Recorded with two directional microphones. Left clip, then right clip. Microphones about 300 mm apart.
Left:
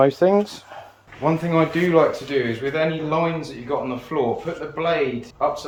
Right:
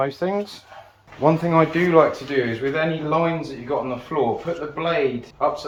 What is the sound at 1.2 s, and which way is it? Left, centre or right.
Speech, right.